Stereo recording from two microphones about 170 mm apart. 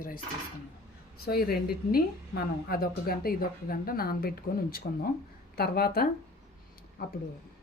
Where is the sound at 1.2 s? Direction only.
65° left (ahead or behind).